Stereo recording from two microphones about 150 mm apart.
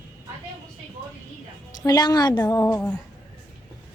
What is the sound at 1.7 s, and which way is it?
A woman's voice, 25° left (ahead or behind).